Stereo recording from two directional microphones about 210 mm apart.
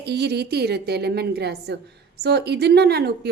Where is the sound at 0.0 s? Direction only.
50° right (ahead or behind).